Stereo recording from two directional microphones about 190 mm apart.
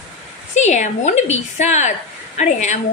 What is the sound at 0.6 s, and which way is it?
A woman's voice, 40° left (ahead or behind).